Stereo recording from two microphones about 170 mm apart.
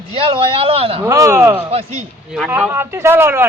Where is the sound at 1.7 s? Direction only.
40° right (ahead or behind).